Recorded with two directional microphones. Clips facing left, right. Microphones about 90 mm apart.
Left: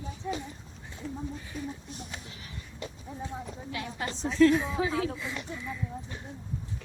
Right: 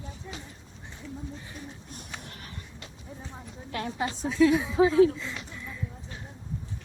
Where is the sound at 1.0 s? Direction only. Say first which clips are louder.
Left 3 dB; 45° left (ahead or behind).